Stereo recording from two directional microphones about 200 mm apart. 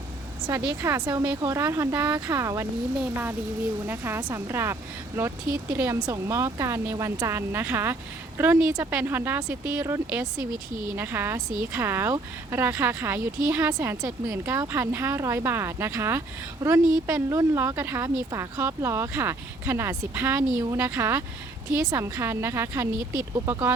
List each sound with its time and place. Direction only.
0.7 s speech: 15° right (ahead or behind)